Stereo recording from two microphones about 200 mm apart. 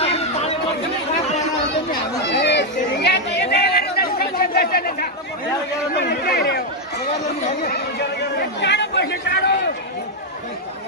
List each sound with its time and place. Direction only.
0.0 s chatter: 30° left (ahead or behind)
2.2 s chatter: 60° left (ahead or behind)
6.0 s chatter: 55° left (ahead or behind)
7.6 s chatter: 55° left (ahead or behind)